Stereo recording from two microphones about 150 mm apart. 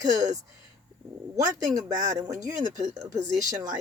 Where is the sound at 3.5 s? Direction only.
55° right (ahead or behind).